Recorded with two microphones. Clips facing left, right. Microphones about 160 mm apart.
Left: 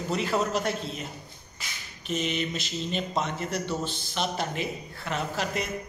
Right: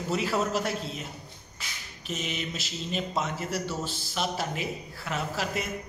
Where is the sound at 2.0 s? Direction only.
Centre (ahead or behind).